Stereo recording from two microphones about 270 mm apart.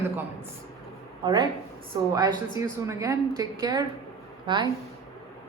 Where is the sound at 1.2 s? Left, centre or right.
Centre.